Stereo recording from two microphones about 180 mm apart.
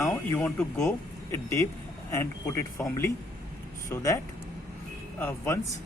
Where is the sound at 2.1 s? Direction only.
15° left (ahead or behind).